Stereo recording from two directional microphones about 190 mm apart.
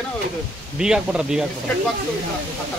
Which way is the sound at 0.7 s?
5° right (ahead or behind).